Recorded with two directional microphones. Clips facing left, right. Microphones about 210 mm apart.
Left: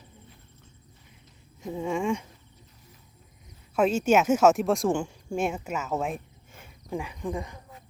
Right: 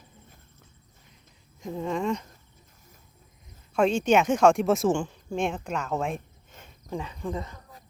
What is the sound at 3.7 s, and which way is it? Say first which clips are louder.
A woman's voice: even; 5° left (ahead or behind).